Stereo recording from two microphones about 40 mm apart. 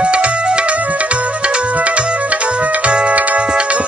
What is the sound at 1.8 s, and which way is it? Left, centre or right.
Music, right.